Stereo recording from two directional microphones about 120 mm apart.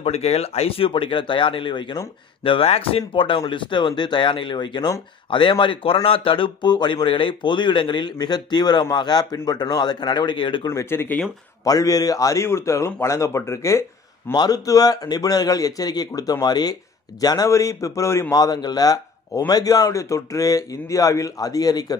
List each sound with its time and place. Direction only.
0.0 s speech: 60° left (ahead or behind); by 5.0 s 35° left (ahead or behind)
5.3 s speech: 45° left (ahead or behind)
10.7 s a man's voice: 20° left (ahead or behind)
11.6 s a man's voice: 30° left (ahead or behind)
14.3 s a man's voice: 35° left (ahead or behind)